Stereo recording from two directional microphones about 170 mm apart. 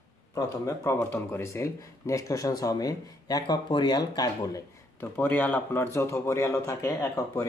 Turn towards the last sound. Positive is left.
turn(degrees=20)  # may be behind; listen again after turning